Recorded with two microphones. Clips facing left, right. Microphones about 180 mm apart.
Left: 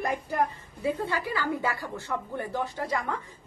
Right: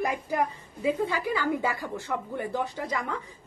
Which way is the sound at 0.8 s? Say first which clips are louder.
Right 2 dB; 15° right (ahead or behind).